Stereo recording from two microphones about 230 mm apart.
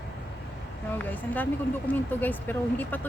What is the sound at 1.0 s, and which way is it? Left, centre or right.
Speech, centre.